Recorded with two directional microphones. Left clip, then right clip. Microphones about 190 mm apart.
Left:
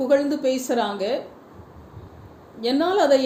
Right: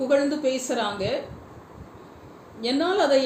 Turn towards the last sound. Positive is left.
turn(degrees=50)  # may be behind; listen again after turning